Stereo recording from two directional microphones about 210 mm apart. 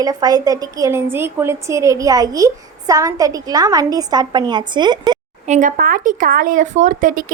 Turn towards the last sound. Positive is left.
turn(degrees=-40)  # may be behind; listen again after turning